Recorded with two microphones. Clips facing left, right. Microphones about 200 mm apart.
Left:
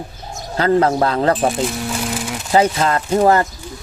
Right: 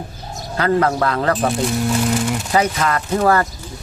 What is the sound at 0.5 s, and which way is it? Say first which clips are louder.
Speech: left 2 dB; 30° left (ahead or behind).